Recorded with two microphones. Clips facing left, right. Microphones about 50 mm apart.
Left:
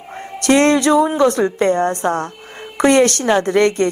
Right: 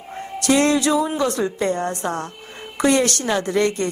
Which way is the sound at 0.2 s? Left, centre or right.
Left.